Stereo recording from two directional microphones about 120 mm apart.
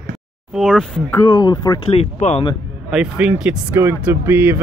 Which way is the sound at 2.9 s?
10° right (ahead or behind).